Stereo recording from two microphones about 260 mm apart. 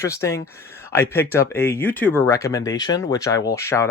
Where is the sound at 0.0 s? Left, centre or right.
Centre.